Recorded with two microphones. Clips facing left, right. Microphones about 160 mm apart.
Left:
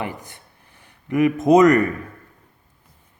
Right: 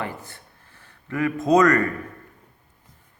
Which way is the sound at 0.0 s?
15° left (ahead or behind).